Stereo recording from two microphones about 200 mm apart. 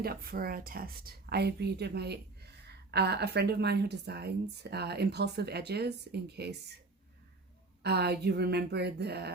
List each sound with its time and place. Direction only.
0.0 s speech: 50° right (ahead or behind)
7.8 s speech: 55° right (ahead or behind)